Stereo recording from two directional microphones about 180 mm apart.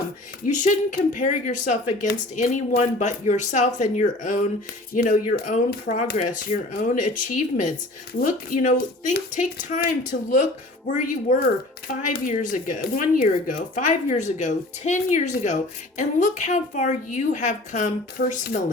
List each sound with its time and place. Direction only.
0.4 s a woman's voice: 45° left (ahead or behind)